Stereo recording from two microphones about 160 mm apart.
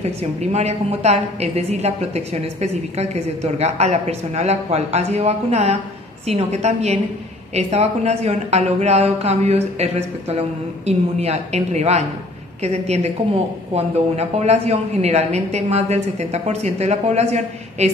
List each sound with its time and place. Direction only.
0.0 s a woman's voice: 40° right (ahead or behind)